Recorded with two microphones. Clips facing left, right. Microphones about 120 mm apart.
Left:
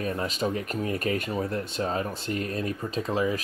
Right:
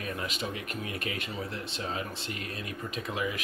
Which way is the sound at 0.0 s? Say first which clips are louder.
Left 7 dB; 35° left (ahead or behind).